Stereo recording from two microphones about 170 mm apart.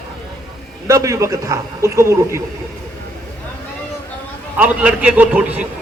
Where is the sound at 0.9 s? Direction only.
20° right (ahead or behind).